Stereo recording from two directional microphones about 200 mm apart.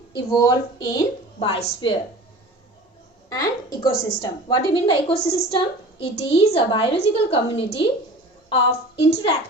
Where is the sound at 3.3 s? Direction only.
20° left (ahead or behind).